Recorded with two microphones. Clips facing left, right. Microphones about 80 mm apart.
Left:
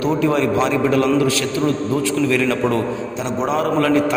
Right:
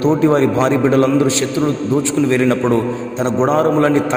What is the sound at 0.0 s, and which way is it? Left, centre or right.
A man's voice, right.